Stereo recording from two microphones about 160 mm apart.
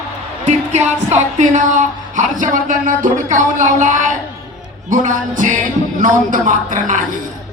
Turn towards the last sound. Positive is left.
turn(degrees=-55)  # may be behind; listen again after turning